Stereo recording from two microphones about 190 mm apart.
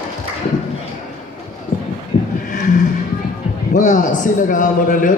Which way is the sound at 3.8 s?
40° left (ahead or behind).